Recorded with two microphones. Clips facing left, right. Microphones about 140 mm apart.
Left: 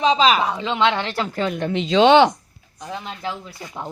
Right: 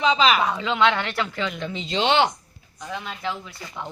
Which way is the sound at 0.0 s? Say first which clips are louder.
Left 3 dB; 40° left (ahead or behind).